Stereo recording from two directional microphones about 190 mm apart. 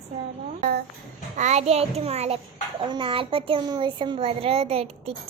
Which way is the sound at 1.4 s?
35° right (ahead or behind).